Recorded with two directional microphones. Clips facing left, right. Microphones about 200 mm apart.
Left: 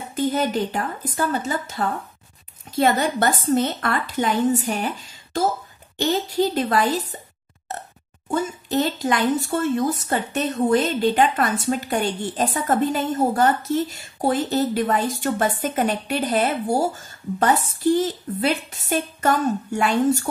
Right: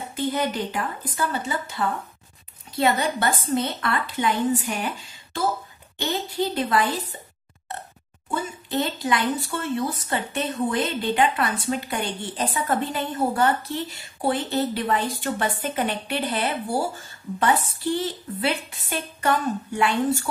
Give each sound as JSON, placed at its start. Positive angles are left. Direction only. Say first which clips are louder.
{"t": 0.2, "sound": "speech", "louder": "left 4 dB", "side_deg": 45}
{"t": 8.3, "sound": "speech", "louder": "left 5 dB", "side_deg": 45}